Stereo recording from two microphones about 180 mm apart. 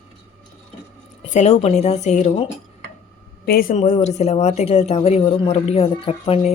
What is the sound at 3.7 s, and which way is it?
A woman's voice, 40° left (ahead or behind).